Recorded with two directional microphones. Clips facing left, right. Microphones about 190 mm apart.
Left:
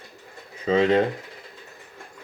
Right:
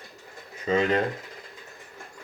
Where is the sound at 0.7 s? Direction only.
30° left (ahead or behind).